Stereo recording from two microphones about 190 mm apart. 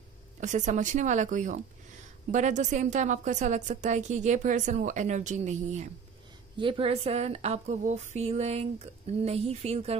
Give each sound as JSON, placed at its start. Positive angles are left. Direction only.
{"t": 0.4, "sound": "a woman's voice", "side_deg": -40}
{"t": 6.5, "sound": "a woman's voice", "side_deg": -25}